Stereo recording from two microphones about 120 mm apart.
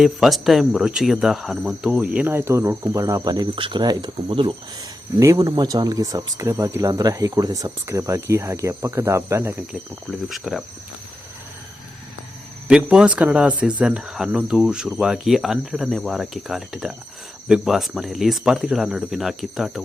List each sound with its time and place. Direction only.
0.0 s speech: centre (ahead or behind); by 4.5 s 45° right (ahead or behind)
5.2 s speech: 30° right (ahead or behind)
10.1 s speech: centre (ahead or behind)
12.6 s speech: 5° right (ahead or behind)